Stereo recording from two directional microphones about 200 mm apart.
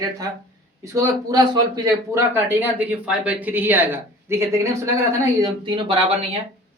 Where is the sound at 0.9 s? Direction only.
15° right (ahead or behind).